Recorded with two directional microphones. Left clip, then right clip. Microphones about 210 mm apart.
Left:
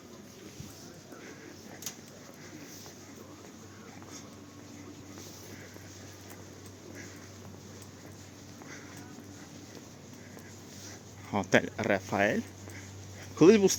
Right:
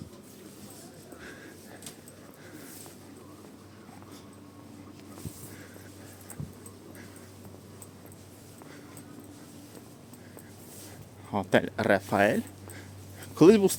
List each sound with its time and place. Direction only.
11.3 s speech: 10° right (ahead or behind)
11.6 s speech: 25° right (ahead or behind)